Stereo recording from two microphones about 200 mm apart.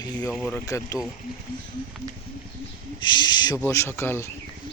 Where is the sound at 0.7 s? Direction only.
15° left (ahead or behind).